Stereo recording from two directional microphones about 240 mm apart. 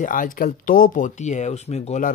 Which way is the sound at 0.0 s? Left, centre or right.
Left.